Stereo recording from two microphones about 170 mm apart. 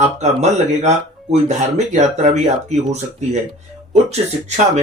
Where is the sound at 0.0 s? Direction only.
40° right (ahead or behind).